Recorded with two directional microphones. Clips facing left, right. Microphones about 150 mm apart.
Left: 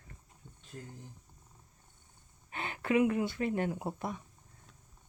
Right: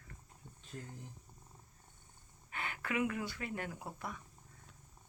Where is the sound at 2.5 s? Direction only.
25° left (ahead or behind).